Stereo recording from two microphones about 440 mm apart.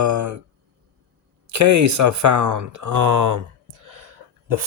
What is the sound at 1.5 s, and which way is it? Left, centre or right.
Speech, right.